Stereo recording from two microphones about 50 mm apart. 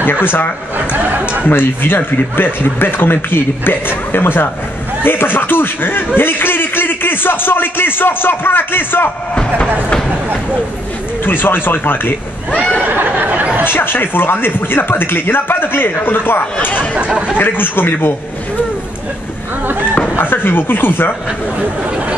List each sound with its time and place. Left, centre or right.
0.0 s speech: left
1.5 s speech: left
9.3 s speech: left
11.2 s speech: left
12.8 s a sound: right
13.7 s speech: left
16.9 s speech: right
17.4 s speech: left
20.2 s speech: left